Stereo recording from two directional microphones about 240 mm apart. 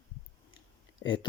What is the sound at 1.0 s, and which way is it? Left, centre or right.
Speech, centre.